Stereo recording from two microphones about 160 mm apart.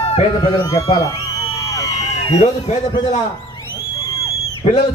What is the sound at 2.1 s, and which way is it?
Speech, 45° left (ahead or behind).